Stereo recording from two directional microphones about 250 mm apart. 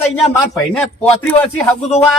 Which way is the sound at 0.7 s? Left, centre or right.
Centre.